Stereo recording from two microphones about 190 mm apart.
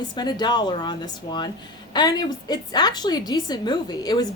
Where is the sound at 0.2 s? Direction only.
20° left (ahead or behind).